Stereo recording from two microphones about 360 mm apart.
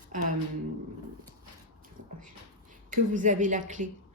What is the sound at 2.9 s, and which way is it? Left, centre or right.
Speech, right.